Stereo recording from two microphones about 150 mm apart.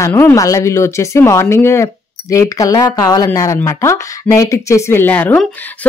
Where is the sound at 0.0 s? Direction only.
15° left (ahead or behind).